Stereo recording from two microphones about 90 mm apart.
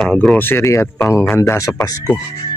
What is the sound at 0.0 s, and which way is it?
Speech, 10° left (ahead or behind).